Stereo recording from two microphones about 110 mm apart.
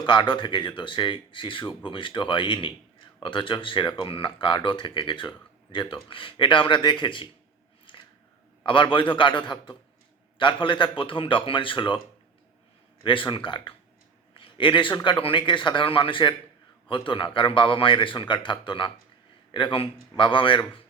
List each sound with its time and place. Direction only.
0.0 s speech: 45° left (ahead or behind)
7.9 s scissors: 50° left (ahead or behind)
8.6 s speech: 50° left (ahead or behind)
13.1 s a man's voice: 50° left (ahead or behind)